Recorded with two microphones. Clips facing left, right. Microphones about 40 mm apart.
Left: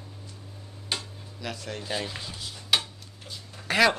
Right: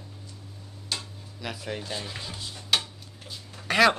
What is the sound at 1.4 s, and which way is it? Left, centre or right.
Speech, centre.